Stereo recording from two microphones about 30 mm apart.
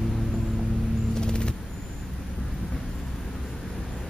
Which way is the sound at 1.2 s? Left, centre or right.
Left.